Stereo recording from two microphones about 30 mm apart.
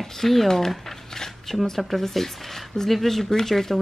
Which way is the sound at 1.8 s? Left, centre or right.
Centre.